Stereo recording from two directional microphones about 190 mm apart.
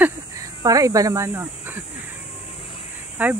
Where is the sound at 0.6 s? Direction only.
20° right (ahead or behind).